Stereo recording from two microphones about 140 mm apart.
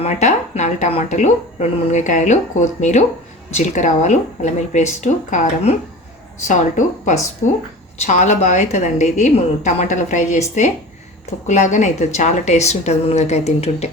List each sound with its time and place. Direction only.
0.0 s a woman's voice: 55° left (ahead or behind)